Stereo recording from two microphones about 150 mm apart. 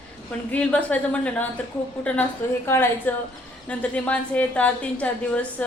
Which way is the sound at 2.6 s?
15° left (ahead or behind).